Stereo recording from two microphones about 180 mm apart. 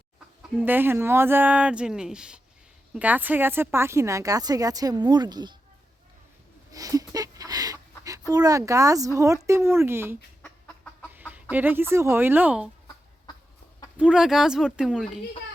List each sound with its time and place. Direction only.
0.5 s speech: 10° right (ahead or behind)
6.7 s a sound: 20° right (ahead or behind)
8.3 s speech: 20° right (ahead or behind)
13.9 s speech: 5° right (ahead or behind)